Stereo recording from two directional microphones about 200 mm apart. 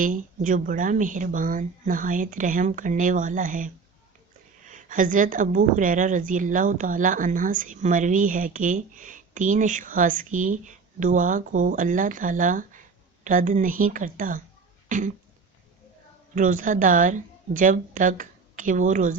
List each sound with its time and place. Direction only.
0.0 s a woman's voice: 40° right (ahead or behind)
14.8 s throat clearing: 40° right (ahead or behind)
16.3 s a woman's voice: 40° right (ahead or behind)